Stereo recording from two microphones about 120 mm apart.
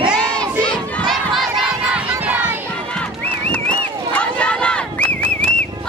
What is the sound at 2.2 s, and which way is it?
Crowd, 15° right (ahead or behind).